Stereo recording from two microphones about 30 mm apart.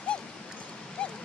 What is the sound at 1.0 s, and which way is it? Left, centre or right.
Dog, left.